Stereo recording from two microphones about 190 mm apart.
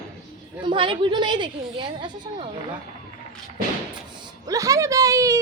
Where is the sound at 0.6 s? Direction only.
25° right (ahead or behind).